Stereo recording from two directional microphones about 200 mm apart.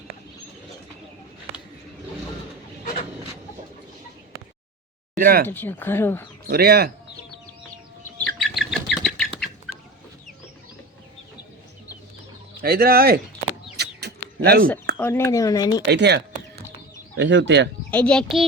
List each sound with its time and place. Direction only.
5.1 s speech: 45° right (ahead or behind)
5.5 s speech: 10° left (ahead or behind)
6.5 s speech: 50° right (ahead or behind)
8.2 s bird: centre (ahead or behind)
12.6 s speech: 50° right (ahead or behind)
13.7 s bird: 55° right (ahead or behind)
14.9 s speech: 10° left (ahead or behind)
15.9 s a sound: 55° right (ahead or behind)
17.2 s speech: 60° right (ahead or behind)
17.9 s a child's voice: 5° left (ahead or behind)